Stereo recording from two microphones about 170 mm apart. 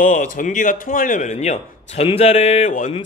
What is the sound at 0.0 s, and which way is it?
A man's voice, 50° left (ahead or behind).